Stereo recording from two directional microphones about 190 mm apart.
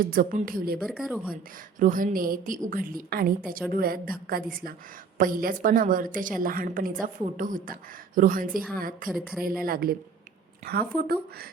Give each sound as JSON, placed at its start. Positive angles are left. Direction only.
{"t": 0.0, "sound": "a woman's voice", "side_deg": -45}
{"t": 0.8, "sound": "speech", "side_deg": 0}
{"t": 1.8, "sound": "a woman's voice", "side_deg": -45}
{"t": 9.0, "sound": "speech", "side_deg": -5}
{"t": 9.6, "sound": "a woman's voice", "side_deg": -50}